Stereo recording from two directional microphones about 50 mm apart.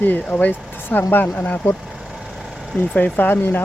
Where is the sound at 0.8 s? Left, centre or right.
Left.